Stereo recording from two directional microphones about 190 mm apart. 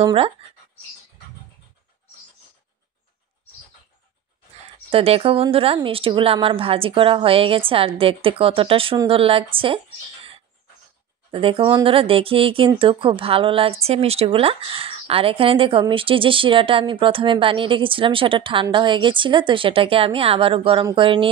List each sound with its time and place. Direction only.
0.0 s speech: 30° right (ahead or behind)
4.9 s speech: 30° right (ahead or behind)
11.3 s speech: 30° right (ahead or behind)